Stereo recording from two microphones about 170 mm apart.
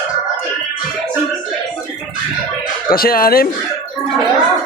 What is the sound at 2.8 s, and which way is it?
Speech, 60° left (ahead or behind).